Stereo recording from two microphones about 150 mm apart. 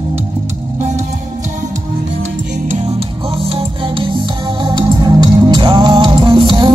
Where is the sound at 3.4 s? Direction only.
35° right (ahead or behind).